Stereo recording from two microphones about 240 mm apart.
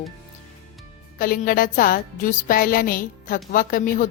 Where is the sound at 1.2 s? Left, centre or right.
Left.